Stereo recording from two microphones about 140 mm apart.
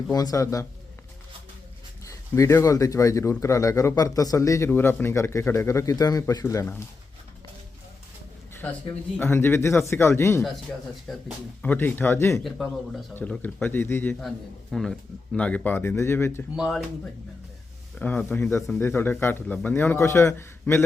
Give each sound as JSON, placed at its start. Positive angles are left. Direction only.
{"t": 0.1, "sound": "speech", "side_deg": 25}
{"t": 2.0, "sound": "speech", "side_deg": 20}
{"t": 8.6, "sound": "a man's voice", "side_deg": 10}
{"t": 11.1, "sound": "speech", "side_deg": 0}
{"t": 11.6, "sound": "a man's voice", "side_deg": 10}
{"t": 12.4, "sound": "speech", "side_deg": 0}
{"t": 13.4, "sound": "a man's voice", "side_deg": 15}
{"t": 14.2, "sound": "a man's voice", "side_deg": 0}
{"t": 16.6, "sound": "speech", "side_deg": -5}
{"t": 17.9, "sound": "a man's voice", "side_deg": 5}